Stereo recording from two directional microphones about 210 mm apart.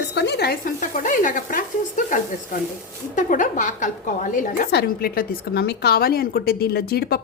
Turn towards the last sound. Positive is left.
turn(degrees=50)  # may be behind; listen again after turning